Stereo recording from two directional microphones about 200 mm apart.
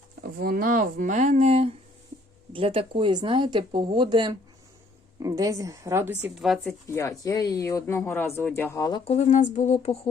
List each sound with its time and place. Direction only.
0.2 s speech: 50° right (ahead or behind); by 6.7 s centre (ahead or behind)
6.8 s speech: 15° left (ahead or behind)
9.0 s a sound: 35° left (ahead or behind)